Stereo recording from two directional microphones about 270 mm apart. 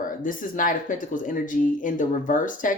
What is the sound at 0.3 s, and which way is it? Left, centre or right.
Speech, left.